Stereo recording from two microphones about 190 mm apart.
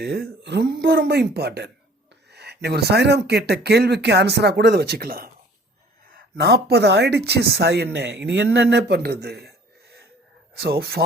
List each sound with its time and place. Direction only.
0.0 s speech: 60° right (ahead or behind)
10.5 s speech: 55° right (ahead or behind)